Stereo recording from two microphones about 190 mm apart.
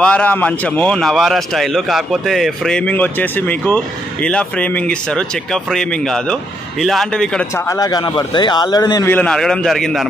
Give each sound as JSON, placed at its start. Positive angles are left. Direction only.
{"t": 0.0, "sound": "a man's voice", "side_deg": 5}
{"t": 7.6, "sound": "a man's voice", "side_deg": 20}
{"t": 9.1, "sound": "a man's voice", "side_deg": 5}